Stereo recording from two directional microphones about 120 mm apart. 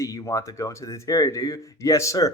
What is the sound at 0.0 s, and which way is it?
Speech, 30° left (ahead or behind).